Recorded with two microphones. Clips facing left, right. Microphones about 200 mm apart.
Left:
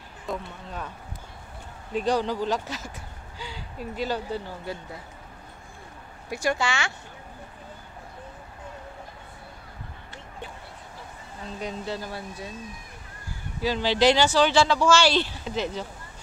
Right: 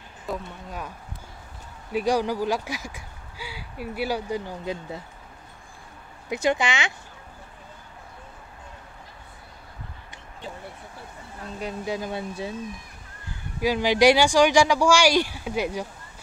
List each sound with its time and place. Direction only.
0.3 s speech: 10° right (ahead or behind)
6.2 s speech: 20° right (ahead or behind)
11.6 s speech: 10° right (ahead or behind)
13.6 s speech: 10° right (ahead or behind)